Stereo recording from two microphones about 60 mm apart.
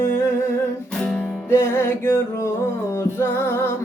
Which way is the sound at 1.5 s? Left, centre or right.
Left.